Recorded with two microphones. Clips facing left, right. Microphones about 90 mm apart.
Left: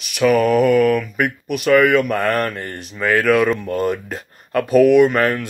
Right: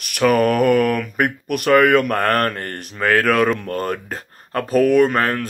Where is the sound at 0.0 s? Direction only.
50° right (ahead or behind).